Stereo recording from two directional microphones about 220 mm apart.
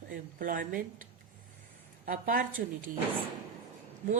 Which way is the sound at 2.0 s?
40° right (ahead or behind).